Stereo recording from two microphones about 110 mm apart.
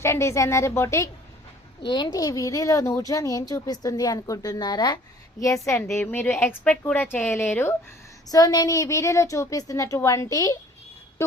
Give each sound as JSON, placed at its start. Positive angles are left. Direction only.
{"t": 0.0, "sound": "a woman's voice", "side_deg": 25}
{"t": 1.9, "sound": "a woman's voice", "side_deg": 40}
{"t": 8.3, "sound": "a woman's voice", "side_deg": 35}